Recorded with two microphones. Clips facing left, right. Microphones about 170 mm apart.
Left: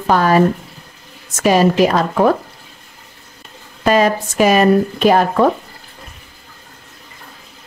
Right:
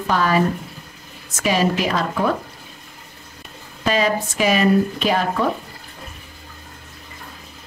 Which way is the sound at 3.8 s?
50° left (ahead or behind).